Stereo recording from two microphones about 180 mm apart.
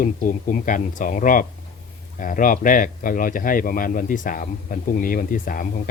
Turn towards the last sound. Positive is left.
turn(degrees=50)  # may be behind; listen again after turning